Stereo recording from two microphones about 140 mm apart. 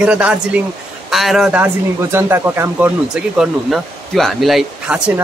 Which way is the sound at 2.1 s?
20° right (ahead or behind).